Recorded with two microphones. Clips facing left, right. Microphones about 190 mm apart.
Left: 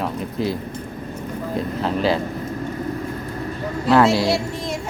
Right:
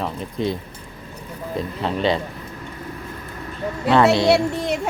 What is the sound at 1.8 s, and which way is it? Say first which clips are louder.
Speech: even; centre (ahead or behind).